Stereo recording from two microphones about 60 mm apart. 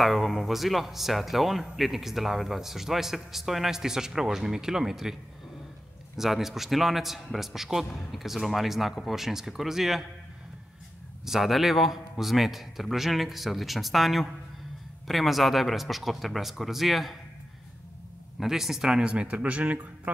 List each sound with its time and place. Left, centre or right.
0.0 s speech: centre
6.1 s speech: centre
11.2 s speech: centre
18.4 s speech: centre; by 19.9 s right